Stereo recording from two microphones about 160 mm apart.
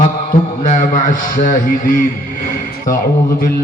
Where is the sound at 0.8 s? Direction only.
55° left (ahead or behind).